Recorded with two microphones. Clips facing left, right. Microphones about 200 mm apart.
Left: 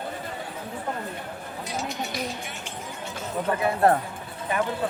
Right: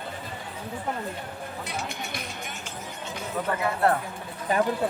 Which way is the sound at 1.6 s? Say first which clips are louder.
Left 6 dB; 55° right (ahead or behind).